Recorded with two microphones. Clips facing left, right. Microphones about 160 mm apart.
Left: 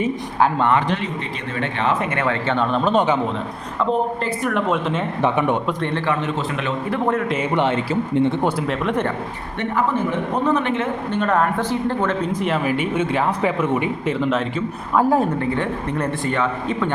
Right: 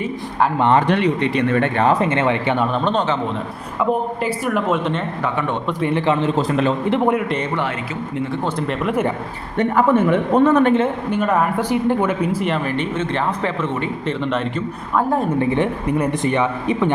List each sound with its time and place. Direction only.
0.9 s a man's voice: 70° right (ahead or behind)
1.9 s a man's voice: 30° right (ahead or behind)
2.7 s a man's voice: 5° left (ahead or behind)
4.2 s speech: 5° right (ahead or behind)
5.2 s a man's voice: 20° left (ahead or behind)
6.1 s a man's voice: 35° right (ahead or behind)
6.9 s a man's voice: 15° right (ahead or behind)
8.1 s a man's voice: 25° left (ahead or behind)
8.4 s speech: 5° left (ahead or behind)
9.6 s a man's voice: 50° right (ahead or behind)
10.6 s a man's voice: 35° right (ahead or behind)
11.1 s speech: 5° right (ahead or behind)
15.4 s a man's voice: 20° right (ahead or behind)